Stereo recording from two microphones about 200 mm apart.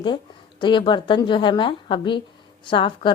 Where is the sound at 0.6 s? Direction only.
25° left (ahead or behind).